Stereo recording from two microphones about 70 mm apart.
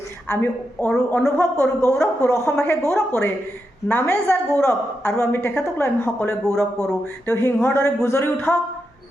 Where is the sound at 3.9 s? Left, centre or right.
Left.